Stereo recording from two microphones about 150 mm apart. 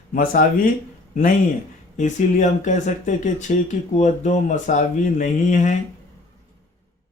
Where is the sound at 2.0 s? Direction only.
55° left (ahead or behind).